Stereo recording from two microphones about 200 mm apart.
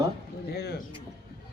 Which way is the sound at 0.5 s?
50° left (ahead or behind).